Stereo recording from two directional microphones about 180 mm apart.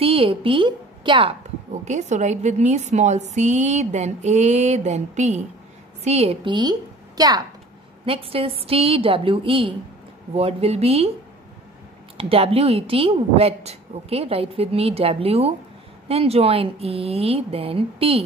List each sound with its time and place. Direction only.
0.0 s a woman's voice: 30° right (ahead or behind)
1.9 s a woman's voice: 40° right (ahead or behind)
12.2 s a woman's voice: 30° right (ahead or behind)